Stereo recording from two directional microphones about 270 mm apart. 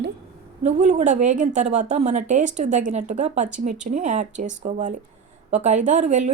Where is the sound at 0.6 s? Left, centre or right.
Right.